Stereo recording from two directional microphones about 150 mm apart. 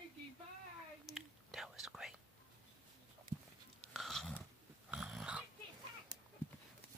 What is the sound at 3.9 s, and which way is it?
Chewing, centre (ahead or behind).